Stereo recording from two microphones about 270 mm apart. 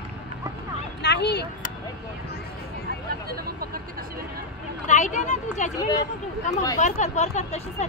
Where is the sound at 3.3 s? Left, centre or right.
Right.